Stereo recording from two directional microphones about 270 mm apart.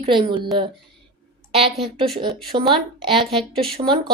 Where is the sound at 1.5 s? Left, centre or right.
Right.